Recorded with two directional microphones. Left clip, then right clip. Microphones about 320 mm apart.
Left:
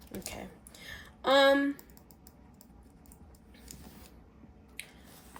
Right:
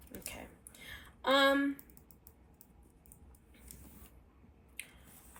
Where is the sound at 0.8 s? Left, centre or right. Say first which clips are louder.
Left 4 dB; left.